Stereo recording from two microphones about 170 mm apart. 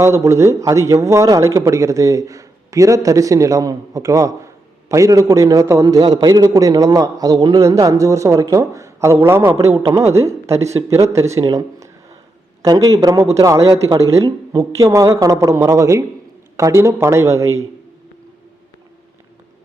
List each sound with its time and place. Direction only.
0.0 s a man's voice: 15° right (ahead or behind)